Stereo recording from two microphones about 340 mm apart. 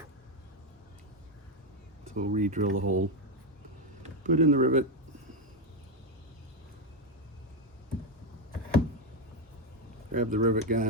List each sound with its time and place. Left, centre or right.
2.1 s speech: right
4.0 s speech: right
10.1 s speech: right